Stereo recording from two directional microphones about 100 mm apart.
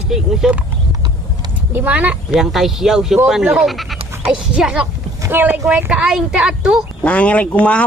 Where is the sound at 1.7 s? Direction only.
15° right (ahead or behind).